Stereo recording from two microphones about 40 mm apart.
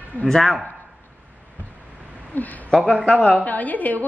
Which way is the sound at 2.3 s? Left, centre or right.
Left.